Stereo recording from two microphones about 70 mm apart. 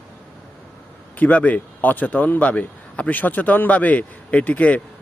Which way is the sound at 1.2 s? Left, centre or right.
Left.